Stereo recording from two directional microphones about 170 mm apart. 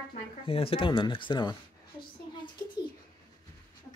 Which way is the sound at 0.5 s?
35° left (ahead or behind).